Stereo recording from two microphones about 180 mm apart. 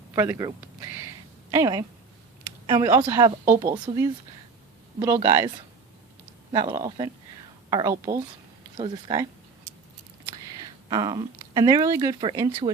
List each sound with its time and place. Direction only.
0.1 s a woman's voice: 20° right (ahead or behind)
6.5 s speech: 20° right (ahead or behind)
10.8 s speech: 20° right (ahead or behind)